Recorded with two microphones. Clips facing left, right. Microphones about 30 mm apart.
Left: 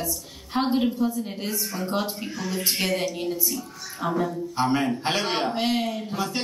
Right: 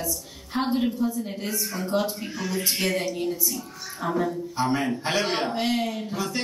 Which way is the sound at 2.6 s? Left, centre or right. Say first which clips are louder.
Left 1 dB; centre.